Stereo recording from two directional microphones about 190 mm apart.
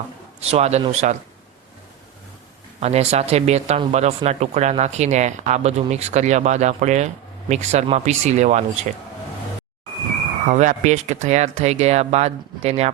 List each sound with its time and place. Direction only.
0.3 s speech: 35° right (ahead or behind)
2.8 s speech: 35° right (ahead or behind)
10.5 s speech: 40° right (ahead or behind)